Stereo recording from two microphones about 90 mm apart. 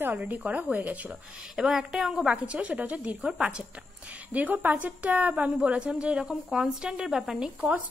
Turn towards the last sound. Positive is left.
turn(degrees=-10)  # may be behind; listen again after turning